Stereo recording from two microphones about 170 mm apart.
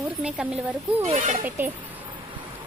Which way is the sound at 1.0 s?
45° right (ahead or behind).